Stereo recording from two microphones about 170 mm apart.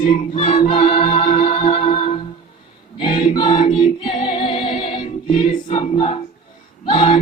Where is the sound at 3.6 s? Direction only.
30° left (ahead or behind).